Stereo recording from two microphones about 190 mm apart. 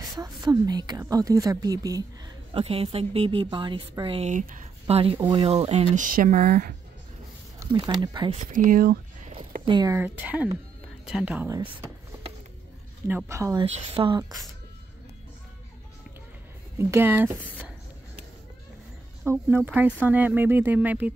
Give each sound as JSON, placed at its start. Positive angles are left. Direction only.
{"t": 0.1, "sound": "a woman's voice", "side_deg": -20}
{"t": 2.5, "sound": "a woman's voice", "side_deg": -30}
{"t": 8.0, "sound": "a woman's voice", "side_deg": -25}
{"t": 8.5, "sound": "speech", "side_deg": -45}
{"t": 9.7, "sound": "a woman's voice", "side_deg": -20}
{"t": 9.9, "sound": "speech", "side_deg": -10}
{"t": 13.1, "sound": "speech", "side_deg": -15}
{"t": 13.9, "sound": "a woman's voice", "side_deg": -25}
{"t": 16.7, "sound": "speech", "side_deg": -10}
{"t": 19.2, "sound": "speech", "side_deg": -10}